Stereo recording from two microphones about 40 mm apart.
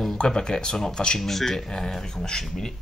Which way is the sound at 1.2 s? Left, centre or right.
Centre.